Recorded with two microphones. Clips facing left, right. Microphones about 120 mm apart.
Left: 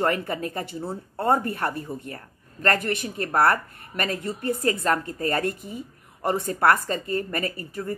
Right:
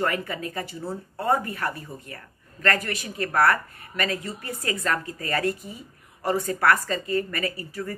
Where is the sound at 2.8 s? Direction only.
55° left (ahead or behind).